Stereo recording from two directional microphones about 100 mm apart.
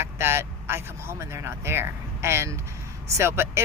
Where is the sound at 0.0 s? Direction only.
25° right (ahead or behind).